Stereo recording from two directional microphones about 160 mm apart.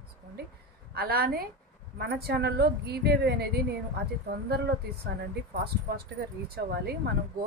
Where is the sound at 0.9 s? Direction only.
70° right (ahead or behind).